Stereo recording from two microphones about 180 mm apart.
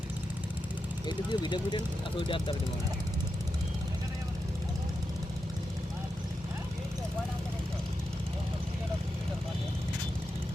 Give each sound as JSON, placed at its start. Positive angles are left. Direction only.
{"t": 1.0, "sound": "speech", "side_deg": 25}